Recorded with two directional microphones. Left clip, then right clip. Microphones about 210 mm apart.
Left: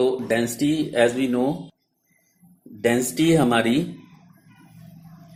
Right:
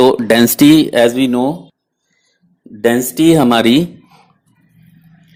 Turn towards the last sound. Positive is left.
turn(degrees=-40)  # may be behind; listen again after turning